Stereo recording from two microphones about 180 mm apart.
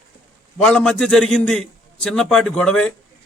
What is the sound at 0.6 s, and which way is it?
A man's voice, 5° left (ahead or behind).